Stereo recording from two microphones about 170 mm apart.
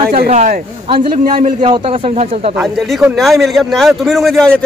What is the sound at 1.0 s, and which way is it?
Speech, 55° right (ahead or behind).